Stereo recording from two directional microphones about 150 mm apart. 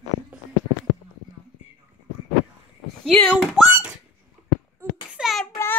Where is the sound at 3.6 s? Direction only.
10° right (ahead or behind).